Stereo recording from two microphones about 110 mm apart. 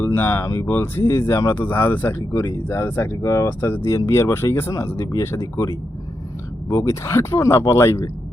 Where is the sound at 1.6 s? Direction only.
20° left (ahead or behind).